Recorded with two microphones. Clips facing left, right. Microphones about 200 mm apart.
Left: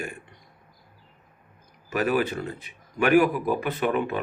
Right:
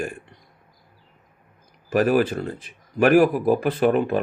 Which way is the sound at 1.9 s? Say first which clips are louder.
Right 5 dB; 50° right (ahead or behind).